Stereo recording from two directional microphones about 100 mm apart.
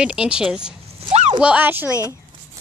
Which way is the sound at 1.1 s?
90° right.